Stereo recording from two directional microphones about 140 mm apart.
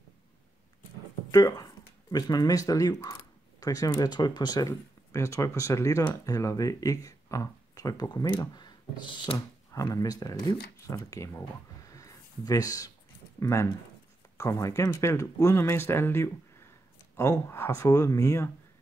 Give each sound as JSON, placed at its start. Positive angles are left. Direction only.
{"t": 1.3, "sound": "speech", "side_deg": 25}
{"t": 9.7, "sound": "speech", "side_deg": 25}
{"t": 11.9, "sound": "a sound", "side_deg": 25}
{"t": 13.4, "sound": "speech", "side_deg": 20}